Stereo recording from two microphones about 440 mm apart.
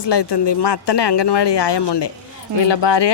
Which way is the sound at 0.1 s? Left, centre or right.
Left.